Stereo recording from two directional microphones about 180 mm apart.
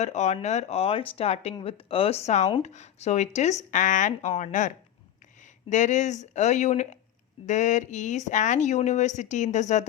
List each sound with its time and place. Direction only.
0.0 s speech: 40° left (ahead or behind)